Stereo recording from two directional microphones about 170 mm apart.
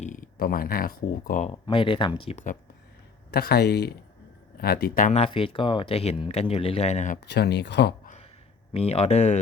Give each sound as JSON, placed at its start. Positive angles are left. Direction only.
{"t": 0.0, "sound": "speech", "side_deg": 50}
{"t": 1.5, "sound": "speech", "side_deg": 30}
{"t": 3.3, "sound": "speech", "side_deg": 65}
{"t": 7.3, "sound": "speech", "side_deg": 80}
{"t": 8.0, "sound": "a sound", "side_deg": 45}
{"t": 8.7, "sound": "speech", "side_deg": 35}